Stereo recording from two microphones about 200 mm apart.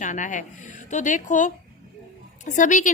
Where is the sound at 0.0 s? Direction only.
40° left (ahead or behind).